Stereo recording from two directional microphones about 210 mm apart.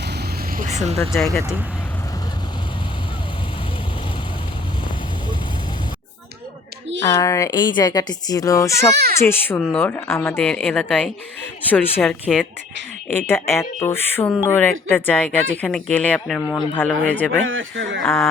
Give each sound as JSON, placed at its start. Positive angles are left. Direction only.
{"t": 0.5, "sound": "vehicle", "side_deg": -35}
{"t": 1.2, "sound": "speech", "side_deg": 0}
{"t": 7.2, "sound": "speech", "side_deg": 15}
{"t": 12.2, "sound": "speech", "side_deg": -5}
{"t": 13.2, "sound": "speech", "side_deg": 10}
{"t": 16.4, "sound": "speech", "side_deg": 20}
{"t": 16.7, "sound": "speech", "side_deg": 5}
{"t": 17.4, "sound": "speech", "side_deg": -65}
{"t": 18.0, "sound": "speech", "side_deg": 0}